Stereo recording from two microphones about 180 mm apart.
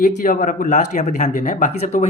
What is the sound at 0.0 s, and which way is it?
Speech, 45° left (ahead or behind).